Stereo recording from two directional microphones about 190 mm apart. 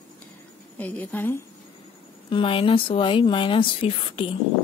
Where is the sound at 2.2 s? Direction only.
30° left (ahead or behind).